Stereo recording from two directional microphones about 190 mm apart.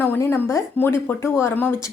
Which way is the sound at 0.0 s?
10° left (ahead or behind).